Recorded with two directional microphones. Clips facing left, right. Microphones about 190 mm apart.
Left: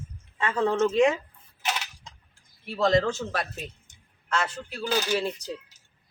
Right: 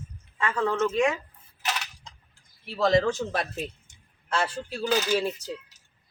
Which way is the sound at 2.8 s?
10° right (ahead or behind).